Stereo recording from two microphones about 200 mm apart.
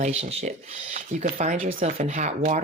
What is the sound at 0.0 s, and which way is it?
Speech, 30° right (ahead or behind).